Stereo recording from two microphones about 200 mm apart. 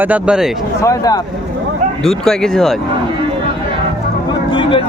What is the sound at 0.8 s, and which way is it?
Speech, 15° left (ahead or behind).